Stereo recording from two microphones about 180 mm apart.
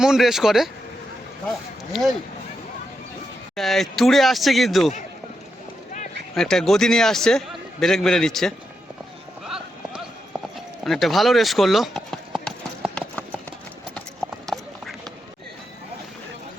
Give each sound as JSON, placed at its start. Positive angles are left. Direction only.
{"t": 0.0, "sound": "a man's voice", "side_deg": -5}
{"t": 3.5, "sound": "a man's voice", "side_deg": 0}
{"t": 6.3, "sound": "a man's voice", "side_deg": 5}
{"t": 9.4, "sound": "clip-clop", "side_deg": 0}
{"t": 10.8, "sound": "speech", "side_deg": 0}
{"t": 12.8, "sound": "clip-clop", "side_deg": 5}
{"t": 14.4, "sound": "clip-clop", "side_deg": 0}